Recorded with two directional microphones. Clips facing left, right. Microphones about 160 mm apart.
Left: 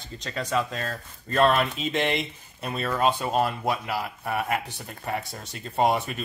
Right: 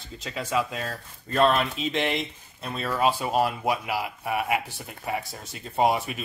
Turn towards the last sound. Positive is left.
turn(degrees=-5)  # may be behind; listen again after turning